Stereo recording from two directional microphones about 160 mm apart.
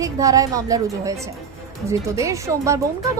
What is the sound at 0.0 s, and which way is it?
A woman's voice, 20° right (ahead or behind).